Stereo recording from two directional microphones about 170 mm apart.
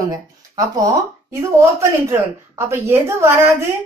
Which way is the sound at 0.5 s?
20° right (ahead or behind).